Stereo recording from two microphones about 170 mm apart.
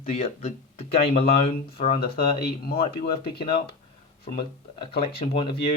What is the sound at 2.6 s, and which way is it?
Speech, 65° left (ahead or behind).